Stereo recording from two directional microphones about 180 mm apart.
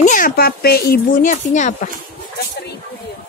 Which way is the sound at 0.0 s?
50° left (ahead or behind).